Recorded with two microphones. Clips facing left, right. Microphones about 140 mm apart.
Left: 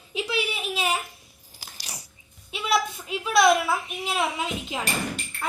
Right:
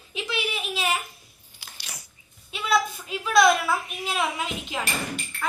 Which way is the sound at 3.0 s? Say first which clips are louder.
Even; 20° left (ahead or behind).